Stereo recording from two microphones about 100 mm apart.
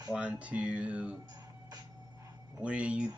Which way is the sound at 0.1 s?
10° right (ahead or behind).